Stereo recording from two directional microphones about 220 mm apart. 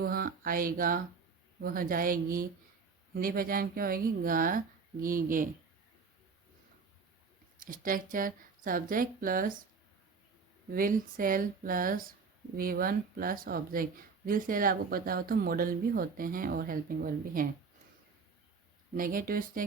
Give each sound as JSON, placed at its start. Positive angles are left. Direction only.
{"t": 0.0, "sound": "speech", "side_deg": -40}
{"t": 7.6, "sound": "speech", "side_deg": -40}
{"t": 10.8, "sound": "speech", "side_deg": -40}
{"t": 18.9, "sound": "speech", "side_deg": -40}